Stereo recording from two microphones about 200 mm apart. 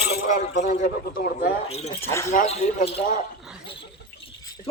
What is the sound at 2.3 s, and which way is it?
Speech, 35° left (ahead or behind).